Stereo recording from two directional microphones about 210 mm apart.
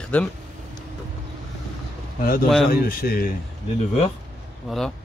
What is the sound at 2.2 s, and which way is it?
A man's voice, 45° left (ahead or behind).